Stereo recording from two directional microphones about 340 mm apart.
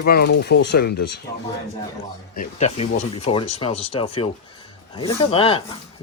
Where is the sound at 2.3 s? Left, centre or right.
Left.